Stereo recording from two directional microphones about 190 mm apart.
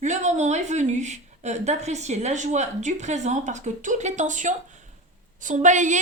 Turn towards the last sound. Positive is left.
turn(degrees=-40)  # may be behind; listen again after turning